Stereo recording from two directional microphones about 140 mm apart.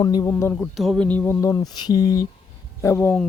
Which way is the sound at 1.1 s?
10° left (ahead or behind).